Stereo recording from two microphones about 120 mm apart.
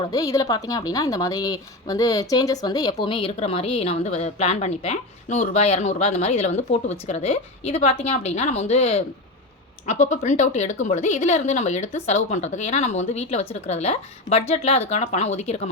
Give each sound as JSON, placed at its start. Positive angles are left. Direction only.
{"t": 0.0, "sound": "a woman's voice", "side_deg": 30}
{"t": 9.8, "sound": "a woman's voice", "side_deg": 75}